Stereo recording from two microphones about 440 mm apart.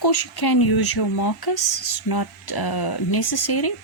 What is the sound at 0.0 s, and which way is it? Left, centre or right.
Speech, left.